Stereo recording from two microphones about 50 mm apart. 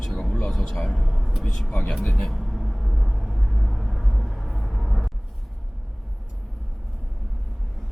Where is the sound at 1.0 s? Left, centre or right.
Centre.